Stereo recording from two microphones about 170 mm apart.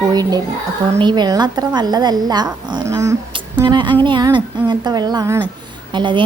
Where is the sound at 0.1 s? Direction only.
25° right (ahead or behind).